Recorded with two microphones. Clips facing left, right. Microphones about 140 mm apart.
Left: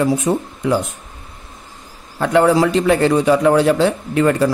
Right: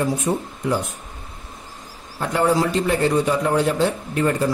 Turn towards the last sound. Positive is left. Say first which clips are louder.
# left 5 dB
turn(degrees=90)